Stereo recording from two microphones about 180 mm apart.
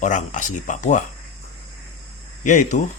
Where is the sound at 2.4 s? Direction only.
45° left (ahead or behind).